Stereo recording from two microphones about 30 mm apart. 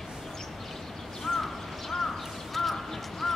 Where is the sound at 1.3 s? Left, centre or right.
Centre.